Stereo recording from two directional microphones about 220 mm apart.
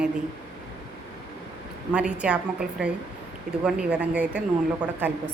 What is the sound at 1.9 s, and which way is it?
A woman's voice, 5° right (ahead or behind).